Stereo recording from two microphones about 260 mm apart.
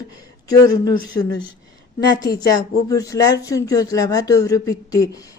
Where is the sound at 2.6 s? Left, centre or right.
Centre.